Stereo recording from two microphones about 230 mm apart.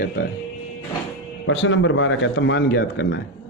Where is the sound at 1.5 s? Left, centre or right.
Left.